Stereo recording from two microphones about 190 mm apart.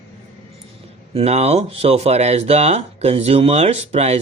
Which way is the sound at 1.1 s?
35° right (ahead or behind).